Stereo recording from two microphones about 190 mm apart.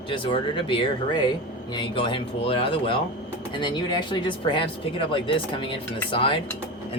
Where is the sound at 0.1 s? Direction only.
25° left (ahead or behind).